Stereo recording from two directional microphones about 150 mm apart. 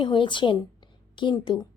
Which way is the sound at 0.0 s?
35° left (ahead or behind).